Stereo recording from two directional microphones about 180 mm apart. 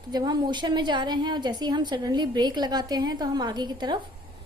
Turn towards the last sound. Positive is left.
turn(degrees=-25)  # may be behind; listen again after turning